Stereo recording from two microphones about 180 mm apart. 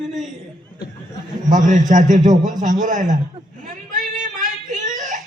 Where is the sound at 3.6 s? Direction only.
45° right (ahead or behind).